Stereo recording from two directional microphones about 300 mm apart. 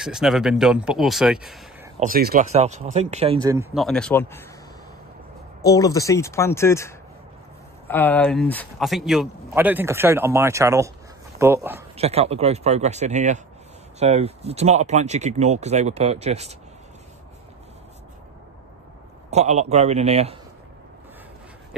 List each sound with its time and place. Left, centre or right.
0.0 s a man's voice: centre
2.0 s speech: right; by 3.6 s centre
3.7 s a man's voice: centre
5.6 s a man's voice: centre
12.0 s speech: centre
19.3 s speech: right